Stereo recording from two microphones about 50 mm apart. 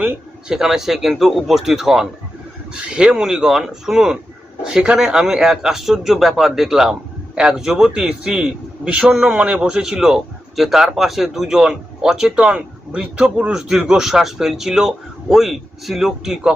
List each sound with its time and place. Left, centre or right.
0.4 s a man's voice: centre
13.5 s a man's voice: centre